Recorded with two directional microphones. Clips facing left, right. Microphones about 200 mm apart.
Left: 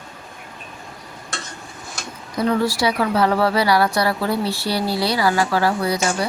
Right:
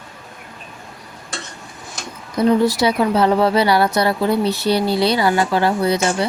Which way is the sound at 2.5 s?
20° right (ahead or behind).